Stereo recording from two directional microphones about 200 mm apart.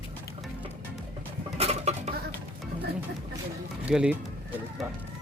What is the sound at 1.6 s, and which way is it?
Dishes, 35° right (ahead or behind).